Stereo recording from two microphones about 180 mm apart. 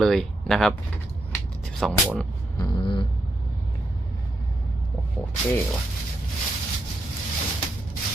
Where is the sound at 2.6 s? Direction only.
25° left (ahead or behind).